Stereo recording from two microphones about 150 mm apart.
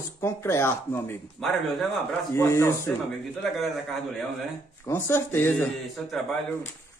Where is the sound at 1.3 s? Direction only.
Centre (ahead or behind).